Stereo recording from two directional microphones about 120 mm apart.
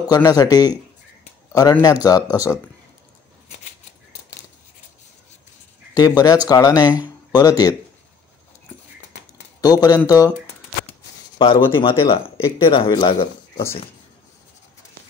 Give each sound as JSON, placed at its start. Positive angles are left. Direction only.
{"t": 0.1, "sound": "a man's voice", "side_deg": 30}
{"t": 5.9, "sound": "a man's voice", "side_deg": 35}
{"t": 9.6, "sound": "a man's voice", "side_deg": 35}
{"t": 11.3, "sound": "speech", "side_deg": 45}